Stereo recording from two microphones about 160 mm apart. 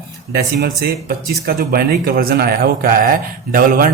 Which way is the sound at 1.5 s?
65° right (ahead or behind).